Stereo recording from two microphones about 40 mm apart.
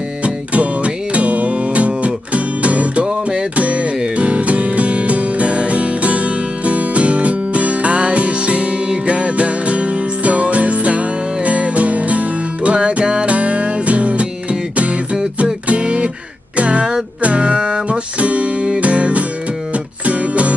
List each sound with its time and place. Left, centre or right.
0.2 s music: right
12.7 s music: right
15.7 s guitar: right
16.5 s music: right